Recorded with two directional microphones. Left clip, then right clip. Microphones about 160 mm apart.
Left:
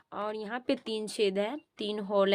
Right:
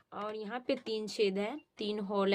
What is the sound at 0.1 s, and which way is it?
Speech, 45° left (ahead or behind).